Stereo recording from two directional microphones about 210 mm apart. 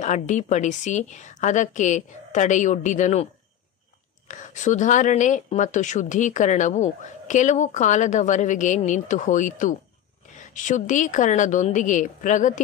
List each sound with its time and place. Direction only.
0.0 s speech: 35° left (ahead or behind)
4.3 s speech: 35° left (ahead or behind)